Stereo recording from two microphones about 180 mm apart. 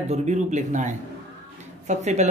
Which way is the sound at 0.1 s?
40° right (ahead or behind).